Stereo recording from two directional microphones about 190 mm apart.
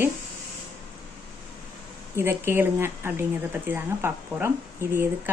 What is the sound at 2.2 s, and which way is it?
Speech, 10° right (ahead or behind).